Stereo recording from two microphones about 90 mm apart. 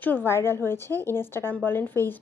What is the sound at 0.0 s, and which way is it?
A woman's voice, 20° left (ahead or behind).